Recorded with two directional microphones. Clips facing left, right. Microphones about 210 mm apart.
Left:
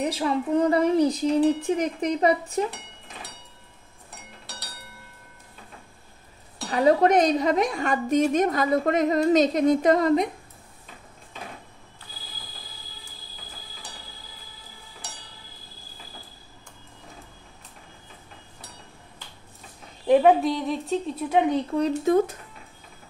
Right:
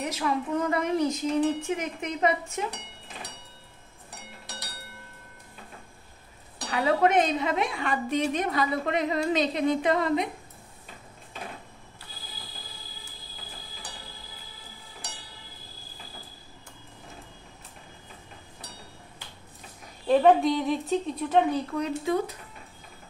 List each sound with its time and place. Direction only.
0.0 s speech: 30° left (ahead or behind)
6.7 s a woman's voice: 40° left (ahead or behind)
20.1 s speech: 10° left (ahead or behind)
21.2 s speech: 10° left (ahead or behind)
21.7 s a woman's voice: 40° left (ahead or behind)